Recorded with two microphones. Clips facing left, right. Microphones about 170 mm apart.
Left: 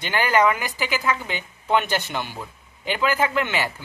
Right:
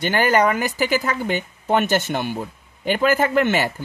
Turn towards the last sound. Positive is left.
turn(degrees=-45)  # may be behind; listen again after turning